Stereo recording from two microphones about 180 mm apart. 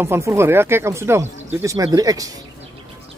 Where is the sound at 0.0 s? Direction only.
15° right (ahead or behind).